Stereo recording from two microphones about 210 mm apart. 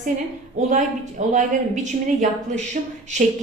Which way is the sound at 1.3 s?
35° right (ahead or behind).